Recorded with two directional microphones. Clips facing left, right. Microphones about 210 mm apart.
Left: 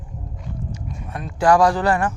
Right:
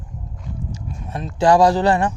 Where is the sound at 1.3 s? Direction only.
25° right (ahead or behind).